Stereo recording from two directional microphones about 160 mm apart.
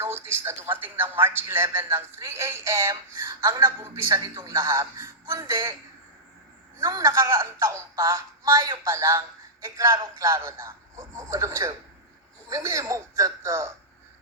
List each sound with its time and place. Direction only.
0.0 s a woman's voice: 15° right (ahead or behind)
6.7 s a woman's voice: 20° right (ahead or behind)